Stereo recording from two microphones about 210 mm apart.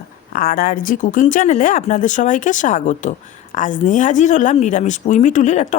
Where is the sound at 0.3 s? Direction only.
40° left (ahead or behind).